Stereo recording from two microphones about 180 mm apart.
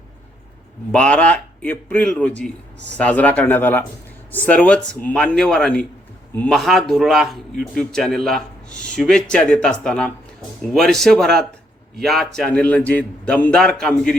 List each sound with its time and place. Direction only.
0.9 s a man's voice: 5° left (ahead or behind)
2.7 s a man's voice: 75° right (ahead or behind)
3.0 s a man's voice: 10° left (ahead or behind)